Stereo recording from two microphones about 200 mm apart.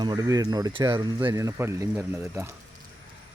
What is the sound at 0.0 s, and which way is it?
Speech, 20° right (ahead or behind).